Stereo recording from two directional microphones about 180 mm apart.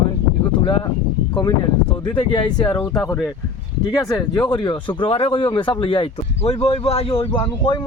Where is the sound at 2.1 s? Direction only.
25° left (ahead or behind).